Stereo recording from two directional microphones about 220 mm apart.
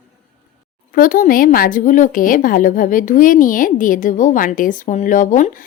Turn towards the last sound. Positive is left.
turn(degrees=35)  # may be behind; listen again after turning